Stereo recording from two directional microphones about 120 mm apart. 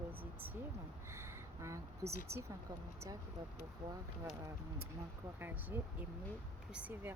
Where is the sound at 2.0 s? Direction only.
20° right (ahead or behind).